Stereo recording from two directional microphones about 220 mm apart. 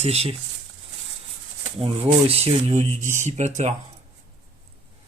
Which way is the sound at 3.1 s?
30° right (ahead or behind).